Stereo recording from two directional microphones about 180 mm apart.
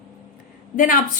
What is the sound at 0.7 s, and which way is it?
Speech, 45° left (ahead or behind).